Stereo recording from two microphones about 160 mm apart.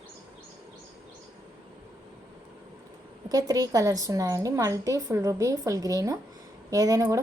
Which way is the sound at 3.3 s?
25° right (ahead or behind).